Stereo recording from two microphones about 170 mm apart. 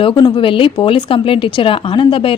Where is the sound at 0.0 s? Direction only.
30° left (ahead or behind).